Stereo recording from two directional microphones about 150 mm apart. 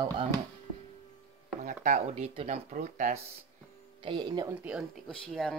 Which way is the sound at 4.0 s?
30° right (ahead or behind).